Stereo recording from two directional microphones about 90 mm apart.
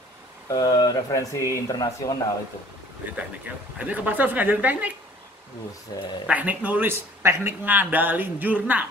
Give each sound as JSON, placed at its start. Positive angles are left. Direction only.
{"t": 0.5, "sound": "speech", "side_deg": 45}
{"t": 3.7, "sound": "speech", "side_deg": -15}
{"t": 6.2, "sound": "speech", "side_deg": -15}